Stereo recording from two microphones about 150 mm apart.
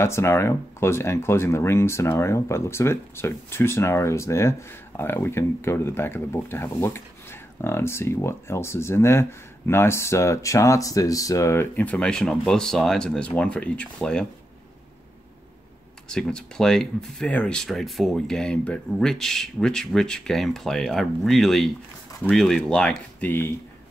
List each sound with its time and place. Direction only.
0.0 s speech: 15° left (ahead or behind)
16.1 s speech: 5° left (ahead or behind)